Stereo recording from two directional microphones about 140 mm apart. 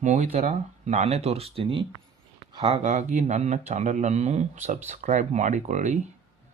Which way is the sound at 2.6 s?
55° right (ahead or behind).